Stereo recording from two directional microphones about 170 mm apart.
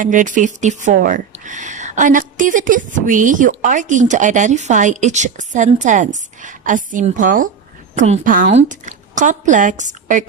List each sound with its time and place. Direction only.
0.0 s a woman's voice: 50° right (ahead or behind)